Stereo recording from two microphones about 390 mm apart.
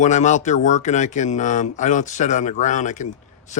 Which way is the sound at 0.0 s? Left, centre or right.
Centre.